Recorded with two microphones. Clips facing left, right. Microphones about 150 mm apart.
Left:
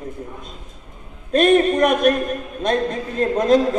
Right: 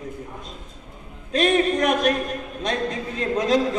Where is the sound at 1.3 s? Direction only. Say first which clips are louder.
Left 5 dB; 55° left (ahead or behind).